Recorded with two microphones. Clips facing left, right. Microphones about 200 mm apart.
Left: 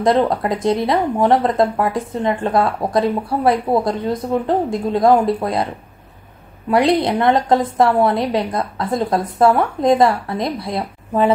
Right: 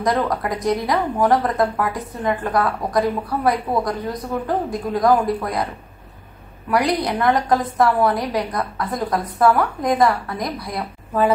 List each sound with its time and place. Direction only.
0.0 s speech: 25° left (ahead or behind)
6.7 s speech: 25° left (ahead or behind)